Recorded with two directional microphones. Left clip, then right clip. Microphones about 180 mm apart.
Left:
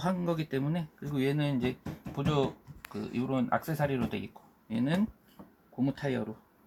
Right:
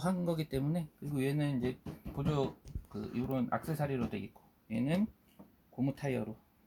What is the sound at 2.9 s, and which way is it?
Speech, 15° right (ahead or behind).